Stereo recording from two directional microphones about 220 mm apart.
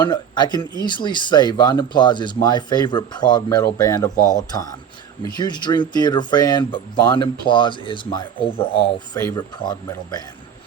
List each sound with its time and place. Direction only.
0.0 s speech: 20° left (ahead or behind)
5.3 s speech: 20° left (ahead or behind)